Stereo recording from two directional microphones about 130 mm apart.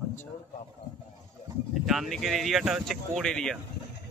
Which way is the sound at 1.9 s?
Centre (ahead or behind).